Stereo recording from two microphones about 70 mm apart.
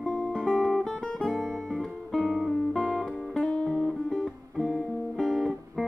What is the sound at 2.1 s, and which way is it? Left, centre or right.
Music, centre.